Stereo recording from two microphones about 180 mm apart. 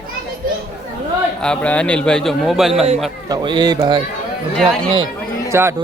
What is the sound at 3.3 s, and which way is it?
Speech, 25° right (ahead or behind).